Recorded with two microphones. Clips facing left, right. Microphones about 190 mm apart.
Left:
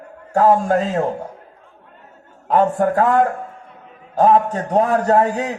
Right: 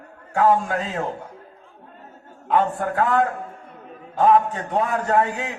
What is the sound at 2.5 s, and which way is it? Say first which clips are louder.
A man's voice: left 5 dB; 40° left (ahead or behind).